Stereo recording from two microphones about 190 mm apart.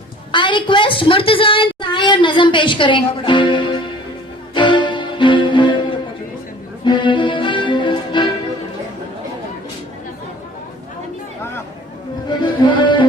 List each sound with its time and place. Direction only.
0.3 s a sound: 25° left (ahead or behind)
4.5 s music: 25° left (ahead or behind)
6.8 s music: 25° left (ahead or behind)
12.4 s music: 25° left (ahead or behind)